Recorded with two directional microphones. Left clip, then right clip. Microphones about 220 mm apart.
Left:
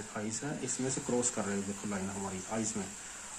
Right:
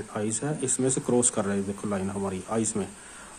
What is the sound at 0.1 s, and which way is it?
Speech, 50° right (ahead or behind).